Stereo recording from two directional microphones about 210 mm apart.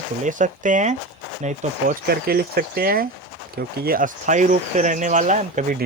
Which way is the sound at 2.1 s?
45° right (ahead or behind).